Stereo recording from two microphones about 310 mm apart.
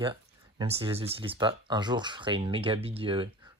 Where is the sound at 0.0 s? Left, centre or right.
Centre.